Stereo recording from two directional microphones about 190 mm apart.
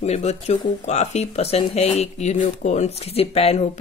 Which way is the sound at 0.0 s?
35° left (ahead or behind).